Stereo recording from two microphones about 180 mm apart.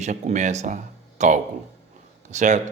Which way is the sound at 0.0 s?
40° right (ahead or behind).